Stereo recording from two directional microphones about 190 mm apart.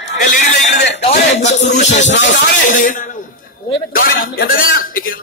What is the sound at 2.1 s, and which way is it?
Speech, 70° left (ahead or behind).